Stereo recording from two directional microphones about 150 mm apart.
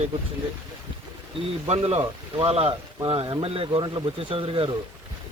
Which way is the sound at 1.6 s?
40° right (ahead or behind).